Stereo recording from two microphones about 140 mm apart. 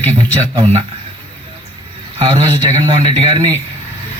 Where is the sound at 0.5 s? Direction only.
45° right (ahead or behind).